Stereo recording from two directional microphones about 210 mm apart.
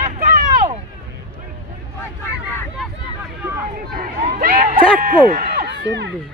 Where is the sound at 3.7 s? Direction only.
45° right (ahead or behind).